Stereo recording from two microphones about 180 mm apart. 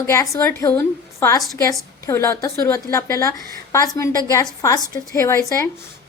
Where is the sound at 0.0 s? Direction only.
15° left (ahead or behind).